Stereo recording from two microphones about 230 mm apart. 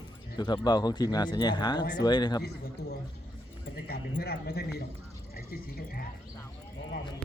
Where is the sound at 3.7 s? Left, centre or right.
Left.